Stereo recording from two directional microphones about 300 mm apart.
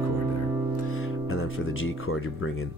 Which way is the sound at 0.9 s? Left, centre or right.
Left.